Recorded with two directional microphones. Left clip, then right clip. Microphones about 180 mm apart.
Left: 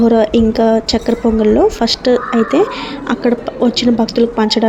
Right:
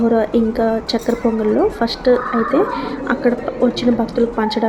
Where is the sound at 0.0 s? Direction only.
30° left (ahead or behind).